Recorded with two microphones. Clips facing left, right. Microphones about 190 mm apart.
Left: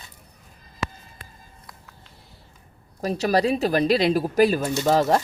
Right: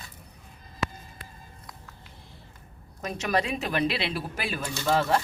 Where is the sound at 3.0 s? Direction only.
35° left (ahead or behind).